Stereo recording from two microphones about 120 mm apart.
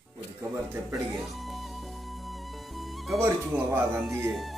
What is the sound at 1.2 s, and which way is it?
Music, centre (ahead or behind).